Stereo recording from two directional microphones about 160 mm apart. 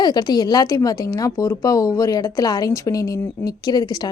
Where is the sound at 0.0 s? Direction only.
25° left (ahead or behind).